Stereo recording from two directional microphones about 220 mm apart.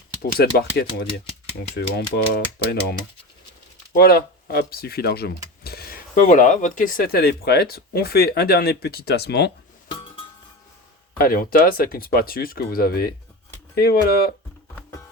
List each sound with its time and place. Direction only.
0.3 s speech: 45° left (ahead or behind)
3.9 s speech: 45° left (ahead or behind)
9.9 s music: 25° left (ahead or behind)
11.2 s speech: 40° left (ahead or behind)